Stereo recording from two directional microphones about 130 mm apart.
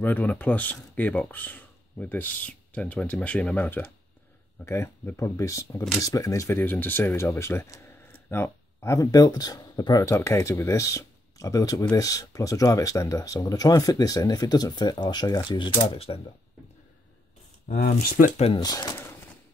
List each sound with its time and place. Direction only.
0.0 s speech: 10° left (ahead or behind); by 16.2 s 45° left (ahead or behind)
17.6 s speech: 85° left
18.6 s speech: 30° left (ahead or behind)